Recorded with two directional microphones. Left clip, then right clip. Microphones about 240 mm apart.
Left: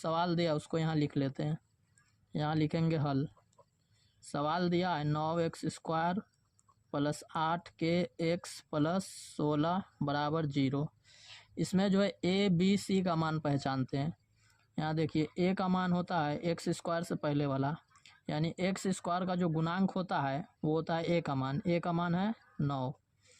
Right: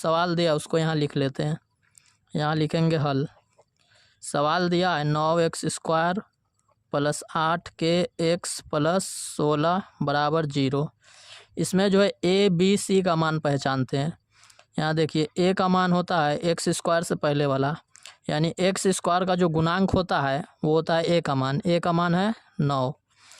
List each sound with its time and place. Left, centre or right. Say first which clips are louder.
0.0 s speech: right 10 dB; right